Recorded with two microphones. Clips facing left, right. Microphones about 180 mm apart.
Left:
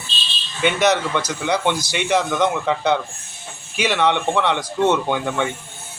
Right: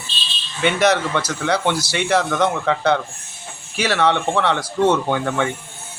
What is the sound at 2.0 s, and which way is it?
Speech, 15° left (ahead or behind).